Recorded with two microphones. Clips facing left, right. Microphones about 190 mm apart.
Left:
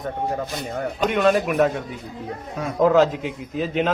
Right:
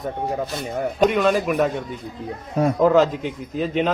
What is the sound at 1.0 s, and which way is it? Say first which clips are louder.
Speech: right 1 dB; centre (ahead or behind).